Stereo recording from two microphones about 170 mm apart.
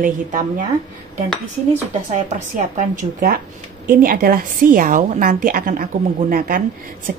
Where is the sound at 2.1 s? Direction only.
50° right (ahead or behind).